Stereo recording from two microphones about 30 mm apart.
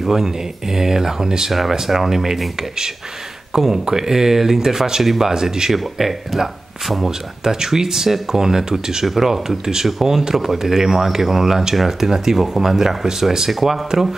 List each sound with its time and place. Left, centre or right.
0.0 s speech: centre
1.5 s speech: centre
3.5 s speech: centre
5.0 s speech: centre
5.3 s speech: centre
5.7 s speech: centre
7.1 s speech: centre
9.0 s speech: centre
13.5 s speech: centre